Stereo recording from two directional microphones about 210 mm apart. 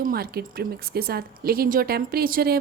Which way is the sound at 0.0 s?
45° right (ahead or behind).